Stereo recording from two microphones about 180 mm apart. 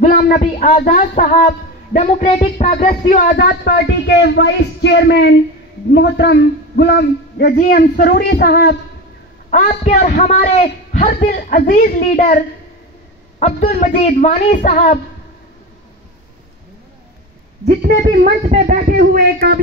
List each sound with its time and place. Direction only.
0.0 s a sound: 45° left (ahead or behind)
0.4 s a woman's voice: 35° left (ahead or behind)
3.3 s speech: 65° left (ahead or behind)
7.5 s a man's voice: 45° left (ahead or behind)
8.0 s speech: 65° left (ahead or behind)
9.5 s a man's voice: 40° left (ahead or behind)
17.6 s speech: 65° right (ahead or behind)
18.5 s speech: 40° right (ahead or behind)
18.9 s speech: 55° right (ahead or behind)